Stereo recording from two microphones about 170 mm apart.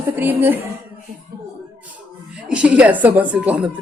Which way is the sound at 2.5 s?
5° right (ahead or behind).